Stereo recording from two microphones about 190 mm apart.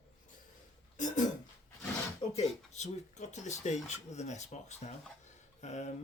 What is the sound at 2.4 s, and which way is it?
Speech, 35° left (ahead or behind).